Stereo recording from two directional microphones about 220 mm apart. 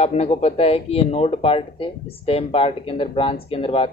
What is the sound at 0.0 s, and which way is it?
A man's voice, 30° left (ahead or behind).